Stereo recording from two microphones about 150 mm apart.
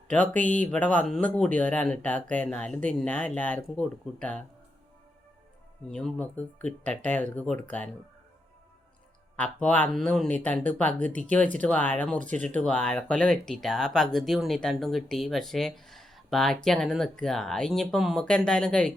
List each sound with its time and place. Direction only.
0.1 s speech: 10° left (ahead or behind)
5.9 s speech: 5° left (ahead or behind)
9.3 s speech: 10° left (ahead or behind)